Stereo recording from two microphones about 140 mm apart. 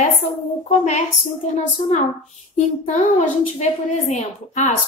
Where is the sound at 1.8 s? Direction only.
55° left (ahead or behind).